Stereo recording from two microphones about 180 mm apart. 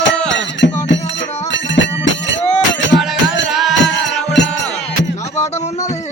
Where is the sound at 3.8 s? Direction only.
75° left (ahead or behind).